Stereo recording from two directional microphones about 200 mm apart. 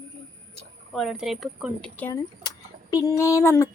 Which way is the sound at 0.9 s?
Centre (ahead or behind).